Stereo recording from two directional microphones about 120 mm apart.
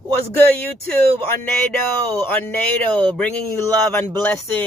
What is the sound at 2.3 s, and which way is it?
Speech, 15° left (ahead or behind).